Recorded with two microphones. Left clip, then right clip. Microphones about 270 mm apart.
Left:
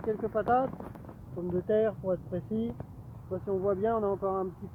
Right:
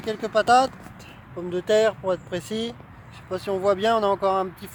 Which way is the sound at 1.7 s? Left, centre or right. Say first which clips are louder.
Right 8 dB; right.